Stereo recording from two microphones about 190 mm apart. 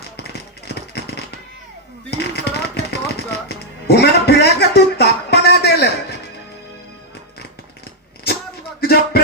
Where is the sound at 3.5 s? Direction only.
60° left (ahead or behind).